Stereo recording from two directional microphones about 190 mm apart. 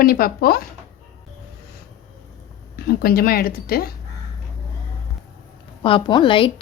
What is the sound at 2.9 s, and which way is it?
A woman's voice, 55° left (ahead or behind).